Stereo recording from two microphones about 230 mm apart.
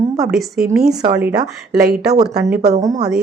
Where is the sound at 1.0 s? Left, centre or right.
Centre.